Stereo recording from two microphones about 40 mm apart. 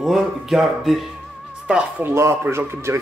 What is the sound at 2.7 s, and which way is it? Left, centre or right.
Speech, right.